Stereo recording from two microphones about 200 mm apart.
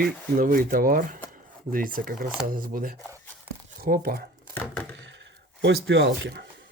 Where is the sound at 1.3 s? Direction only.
45° right (ahead or behind).